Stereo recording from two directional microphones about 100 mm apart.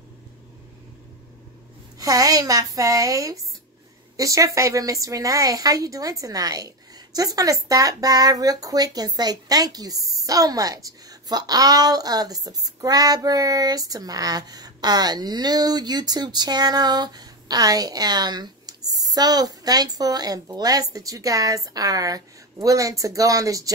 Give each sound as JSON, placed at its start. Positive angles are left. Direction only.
{"t": 2.0, "sound": "speech", "side_deg": -35}